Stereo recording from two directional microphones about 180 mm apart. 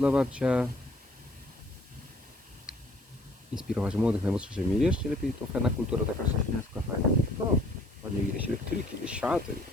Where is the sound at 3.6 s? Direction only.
5° right (ahead or behind).